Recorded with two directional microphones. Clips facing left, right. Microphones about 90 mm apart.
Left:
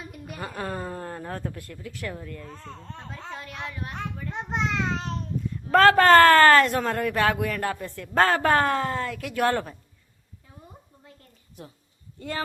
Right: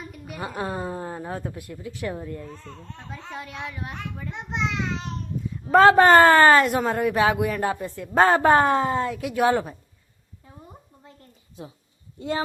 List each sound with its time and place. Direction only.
0.1 s a sound: centre (ahead or behind)
0.4 s speech: 20° right (ahead or behind)
2.5 s a child's voice: 35° left (ahead or behind)
3.3 s speech: 20° right (ahead or behind)
4.3 s a child's voice: 40° left (ahead or behind)
5.6 s speech: 20° right (ahead or behind)